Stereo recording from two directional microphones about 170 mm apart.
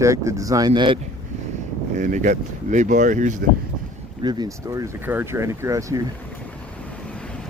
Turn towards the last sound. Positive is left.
turn(degrees=-20)  # may be behind; listen again after turning